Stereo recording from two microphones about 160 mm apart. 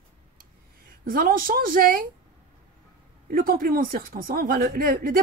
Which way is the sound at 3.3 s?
65° right (ahead or behind).